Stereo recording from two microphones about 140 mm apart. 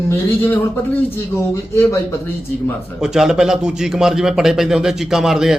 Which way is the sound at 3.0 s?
5° right (ahead or behind).